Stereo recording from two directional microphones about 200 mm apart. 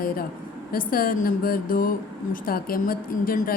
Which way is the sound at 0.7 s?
45° left (ahead or behind).